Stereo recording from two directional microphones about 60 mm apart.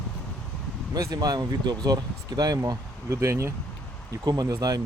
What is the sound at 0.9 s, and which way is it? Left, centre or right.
Speech, right.